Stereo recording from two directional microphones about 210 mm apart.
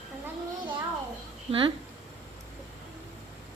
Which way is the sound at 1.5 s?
25° right (ahead or behind).